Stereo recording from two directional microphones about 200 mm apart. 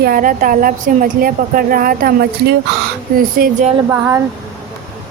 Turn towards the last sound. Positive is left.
turn(degrees=-15)  # may be behind; listen again after turning